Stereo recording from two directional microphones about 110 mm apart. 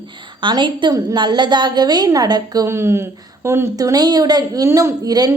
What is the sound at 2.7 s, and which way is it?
Speech, 25° right (ahead or behind).